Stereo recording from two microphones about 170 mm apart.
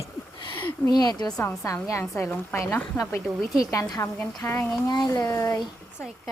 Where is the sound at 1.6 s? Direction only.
20° left (ahead or behind).